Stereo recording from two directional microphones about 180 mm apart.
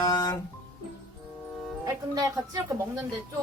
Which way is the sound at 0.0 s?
20° left (ahead or behind).